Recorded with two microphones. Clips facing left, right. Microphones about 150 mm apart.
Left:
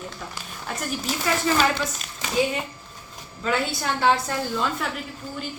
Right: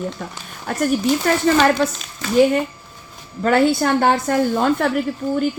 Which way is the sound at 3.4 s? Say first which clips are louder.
Right 10 dB; 55° right (ahead or behind).